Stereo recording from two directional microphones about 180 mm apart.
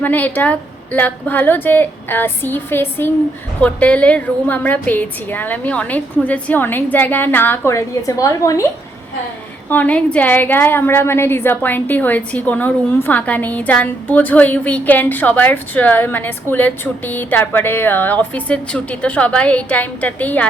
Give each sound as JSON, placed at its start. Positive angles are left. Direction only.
{"t": 0.0, "sound": "a woman's voice", "side_deg": 10}
{"t": 9.6, "sound": "a woman's voice", "side_deg": 10}